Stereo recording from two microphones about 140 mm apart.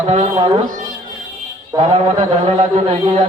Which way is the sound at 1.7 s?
35° right (ahead or behind).